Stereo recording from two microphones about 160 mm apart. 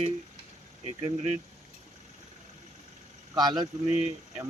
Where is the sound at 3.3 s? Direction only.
25° right (ahead or behind).